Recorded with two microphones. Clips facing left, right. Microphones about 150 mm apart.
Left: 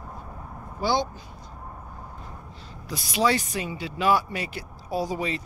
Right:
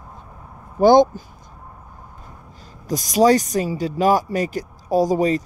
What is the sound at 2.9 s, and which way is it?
Speech, 40° right (ahead or behind).